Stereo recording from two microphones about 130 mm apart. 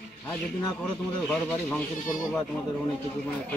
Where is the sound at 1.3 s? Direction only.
5° left (ahead or behind).